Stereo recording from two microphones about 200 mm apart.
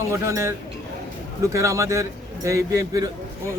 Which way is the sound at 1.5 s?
15° right (ahead or behind).